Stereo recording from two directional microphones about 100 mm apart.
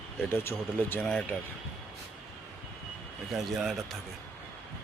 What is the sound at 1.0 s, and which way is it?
Speech, 10° left (ahead or behind).